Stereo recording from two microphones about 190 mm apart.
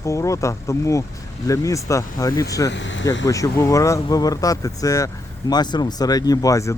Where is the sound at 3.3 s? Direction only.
15° left (ahead or behind).